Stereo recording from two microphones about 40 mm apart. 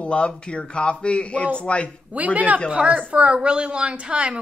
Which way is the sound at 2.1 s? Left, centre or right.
Right.